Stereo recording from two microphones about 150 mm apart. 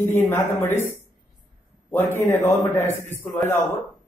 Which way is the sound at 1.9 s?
15° left (ahead or behind).